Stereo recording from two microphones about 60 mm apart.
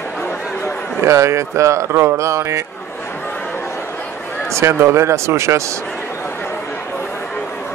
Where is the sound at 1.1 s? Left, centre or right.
Right.